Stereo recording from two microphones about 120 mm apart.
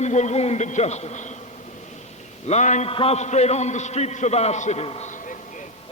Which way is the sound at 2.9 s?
55° left (ahead or behind).